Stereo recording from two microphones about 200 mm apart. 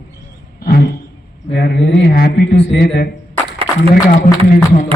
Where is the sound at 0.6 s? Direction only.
50° left (ahead or behind).